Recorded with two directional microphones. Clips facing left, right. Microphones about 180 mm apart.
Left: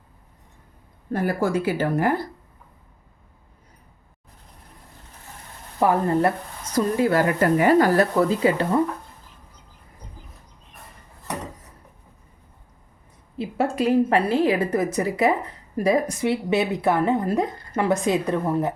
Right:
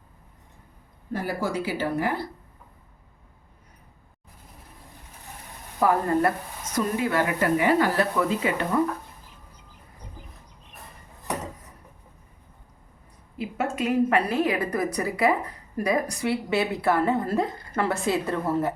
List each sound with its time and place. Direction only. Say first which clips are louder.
1.1 s speech: left 5 dB; 50° left (ahead or behind)
5.8 s a woman's voice: left 2 dB; 25° left (ahead or behind)
6.7 s speech: left 5 dB; 40° left (ahead or behind)
13.4 s a woman's voice: left 5 dB; 30° left (ahead or behind); by 18.7 s 15° left (ahead or behind)